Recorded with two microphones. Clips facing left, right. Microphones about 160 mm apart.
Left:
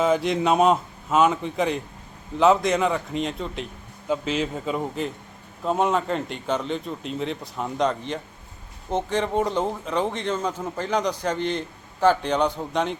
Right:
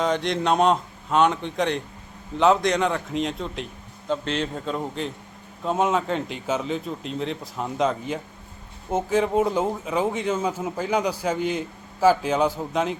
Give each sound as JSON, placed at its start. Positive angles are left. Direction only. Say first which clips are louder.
{"t": 0.0, "sound": "speech", "louder": "left 2 dB", "side_deg": 5}